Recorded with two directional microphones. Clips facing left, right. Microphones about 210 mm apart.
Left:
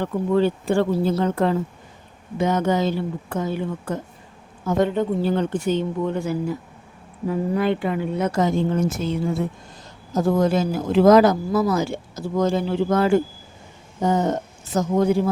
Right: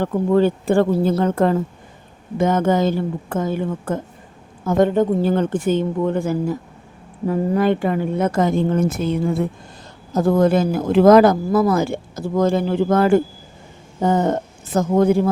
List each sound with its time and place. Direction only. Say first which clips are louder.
0.0 s speech: right 3 dB; 45° right (ahead or behind)